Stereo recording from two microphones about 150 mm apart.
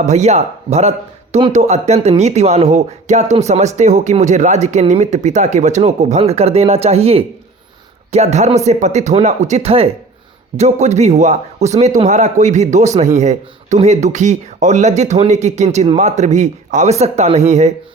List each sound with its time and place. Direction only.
0.0 s a man's voice: 50° right (ahead or behind)